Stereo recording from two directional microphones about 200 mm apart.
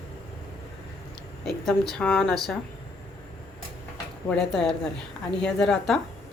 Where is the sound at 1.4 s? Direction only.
Centre (ahead or behind).